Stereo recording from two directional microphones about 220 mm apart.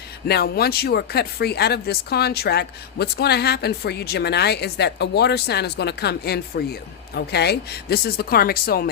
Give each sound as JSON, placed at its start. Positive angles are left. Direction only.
{"t": 0.3, "sound": "speech", "side_deg": 45}